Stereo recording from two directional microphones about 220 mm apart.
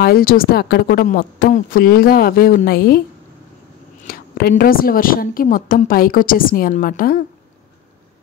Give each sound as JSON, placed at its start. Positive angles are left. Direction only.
{"t": 0.0, "sound": "a woman's voice", "side_deg": 45}
{"t": 4.1, "sound": "a woman's voice", "side_deg": 45}